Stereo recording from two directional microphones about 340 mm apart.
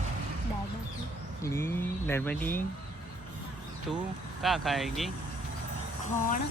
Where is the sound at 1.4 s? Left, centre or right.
Centre.